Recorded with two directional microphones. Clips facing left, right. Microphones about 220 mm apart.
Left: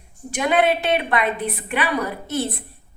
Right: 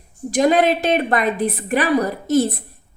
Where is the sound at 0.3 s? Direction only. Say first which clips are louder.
Right 4 dB; 35° right (ahead or behind).